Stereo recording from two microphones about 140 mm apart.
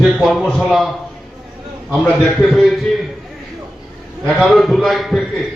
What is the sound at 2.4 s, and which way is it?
Speech, centre (ahead or behind).